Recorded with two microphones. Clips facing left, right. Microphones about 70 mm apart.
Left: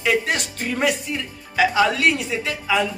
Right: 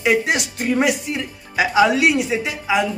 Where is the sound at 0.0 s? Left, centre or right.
Centre.